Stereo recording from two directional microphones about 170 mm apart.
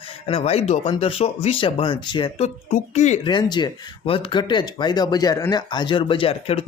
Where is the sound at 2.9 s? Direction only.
45° left (ahead or behind).